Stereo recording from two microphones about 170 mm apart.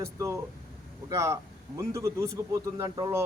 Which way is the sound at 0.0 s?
15° right (ahead or behind).